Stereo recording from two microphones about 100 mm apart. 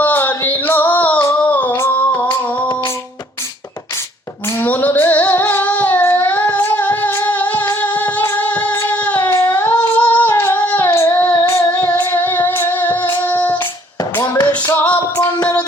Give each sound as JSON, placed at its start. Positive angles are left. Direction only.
{"t": 0.0, "sound": "a sound", "side_deg": 20}
{"t": 1.5, "sound": "humming", "side_deg": 15}
{"t": 4.4, "sound": "singing", "side_deg": 25}
{"t": 10.3, "sound": "child singing", "side_deg": 25}
{"t": 11.3, "sound": "music", "side_deg": 25}
{"t": 13.2, "sound": "child singing", "side_deg": 15}
{"t": 14.0, "sound": "tap", "side_deg": 40}
{"t": 14.7, "sound": "music", "side_deg": 20}